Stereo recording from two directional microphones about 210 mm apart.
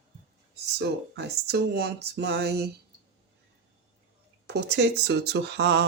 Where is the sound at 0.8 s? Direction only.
55° right (ahead or behind).